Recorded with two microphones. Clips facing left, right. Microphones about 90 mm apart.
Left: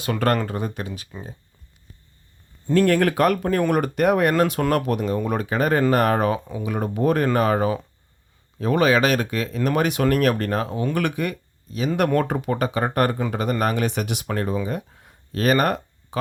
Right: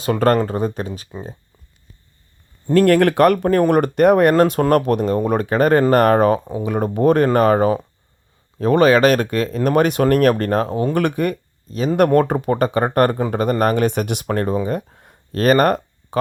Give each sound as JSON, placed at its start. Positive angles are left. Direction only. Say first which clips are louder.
{"t": 0.0, "sound": "speech", "louder": "right 6 dB", "side_deg": -30}
{"t": 2.6, "sound": "speech", "louder": "right 5 dB", "side_deg": -60}